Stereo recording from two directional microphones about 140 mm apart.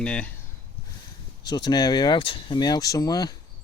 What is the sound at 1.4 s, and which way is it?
Speech, 30° left (ahead or behind).